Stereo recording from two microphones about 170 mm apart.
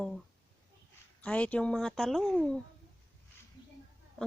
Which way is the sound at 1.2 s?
5° left (ahead or behind).